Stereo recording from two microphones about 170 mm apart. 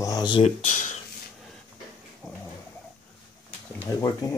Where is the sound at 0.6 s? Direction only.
45° left (ahead or behind).